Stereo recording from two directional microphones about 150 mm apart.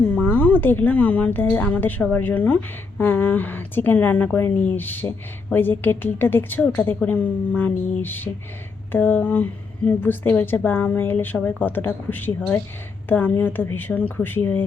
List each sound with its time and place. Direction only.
0.1 s speech: 10° left (ahead or behind)